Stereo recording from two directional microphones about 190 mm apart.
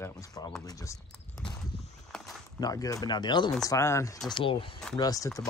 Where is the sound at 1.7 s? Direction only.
30° left (ahead or behind).